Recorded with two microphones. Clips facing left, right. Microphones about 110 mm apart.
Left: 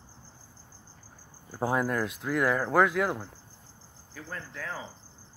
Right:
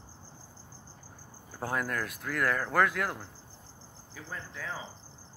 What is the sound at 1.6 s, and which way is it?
Speech, 20° left (ahead or behind).